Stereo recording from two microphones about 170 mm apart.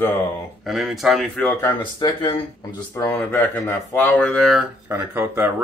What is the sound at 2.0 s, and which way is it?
Speech, 25° left (ahead or behind).